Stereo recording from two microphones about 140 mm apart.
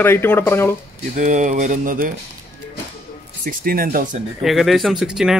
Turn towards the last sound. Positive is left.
turn(degrees=-5)  # may be behind; listen again after turning